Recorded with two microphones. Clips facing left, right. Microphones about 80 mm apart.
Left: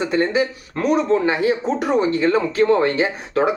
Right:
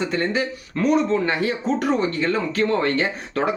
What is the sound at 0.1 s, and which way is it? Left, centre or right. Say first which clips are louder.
Speech: left 4 dB; left.